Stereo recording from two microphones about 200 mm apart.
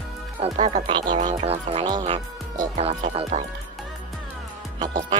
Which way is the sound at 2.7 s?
35° right (ahead or behind).